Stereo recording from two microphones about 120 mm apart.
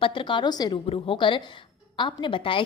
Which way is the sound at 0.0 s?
45° left (ahead or behind).